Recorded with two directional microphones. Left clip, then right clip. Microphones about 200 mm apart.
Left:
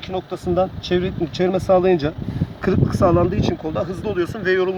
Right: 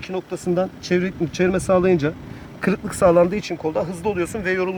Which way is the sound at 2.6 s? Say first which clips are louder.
Right 1 dB; 35° right (ahead or behind).